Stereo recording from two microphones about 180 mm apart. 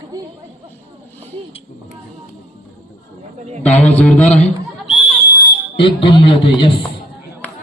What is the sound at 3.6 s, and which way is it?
Speech, 10° left (ahead or behind).